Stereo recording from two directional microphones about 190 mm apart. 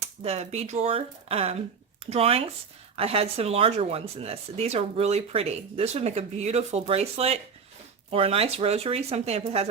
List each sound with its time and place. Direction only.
0.2 s speech: 35° right (ahead or behind)